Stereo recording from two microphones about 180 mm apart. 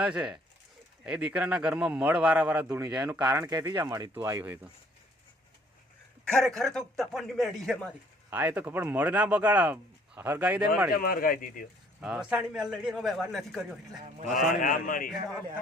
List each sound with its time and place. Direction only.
0.0 s a man's voice: 5° right (ahead or behind)
6.3 s a man's voice: 5° left (ahead or behind)
8.3 s speech: 10° right (ahead or behind)
10.9 s a man's voice: 55° left (ahead or behind)
11.9 s a man's voice: 5° right (ahead or behind)
14.3 s a man's voice: 50° left (ahead or behind)